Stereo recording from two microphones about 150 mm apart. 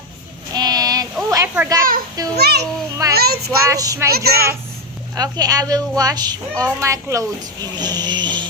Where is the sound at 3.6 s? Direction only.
20° right (ahead or behind).